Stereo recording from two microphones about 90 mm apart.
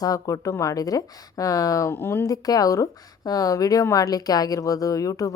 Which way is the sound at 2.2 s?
45° left (ahead or behind).